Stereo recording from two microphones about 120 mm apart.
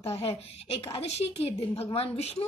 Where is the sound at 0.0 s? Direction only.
55° left (ahead or behind).